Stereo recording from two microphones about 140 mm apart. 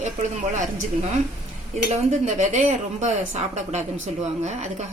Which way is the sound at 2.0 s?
55° right (ahead or behind).